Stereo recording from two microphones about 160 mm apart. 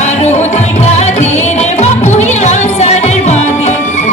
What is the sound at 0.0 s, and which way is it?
Music, 45° left (ahead or behind).